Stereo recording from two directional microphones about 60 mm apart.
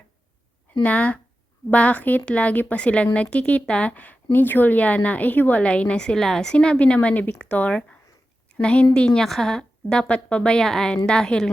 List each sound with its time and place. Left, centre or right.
0.8 s a woman's voice: left